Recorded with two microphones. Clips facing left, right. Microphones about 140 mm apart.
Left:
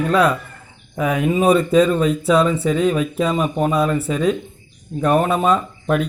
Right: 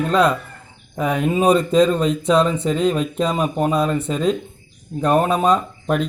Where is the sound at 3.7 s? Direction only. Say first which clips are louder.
Left 1 dB; 5° left (ahead or behind).